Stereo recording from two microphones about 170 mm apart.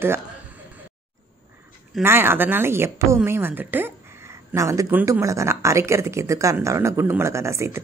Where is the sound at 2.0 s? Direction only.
15° right (ahead or behind).